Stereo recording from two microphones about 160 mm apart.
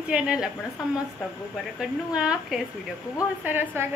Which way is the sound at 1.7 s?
5° right (ahead or behind).